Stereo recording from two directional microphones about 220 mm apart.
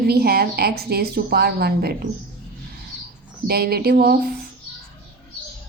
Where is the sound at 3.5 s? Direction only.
45° right (ahead or behind).